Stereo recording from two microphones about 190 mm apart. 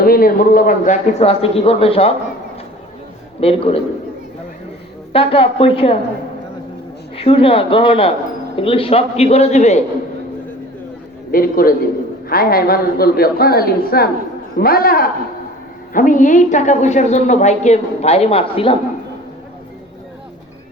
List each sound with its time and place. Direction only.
0.0 s speech: 50° left (ahead or behind)
1.2 s a woman's voice: 30° left (ahead or behind)
3.4 s a woman's voice: 30° left (ahead or behind)
5.1 s speech: 30° left (ahead or behind)
7.2 s a woman's voice: 30° left (ahead or behind)
11.3 s a woman's voice: 50° left (ahead or behind); by 18.8 s 30° left (ahead or behind)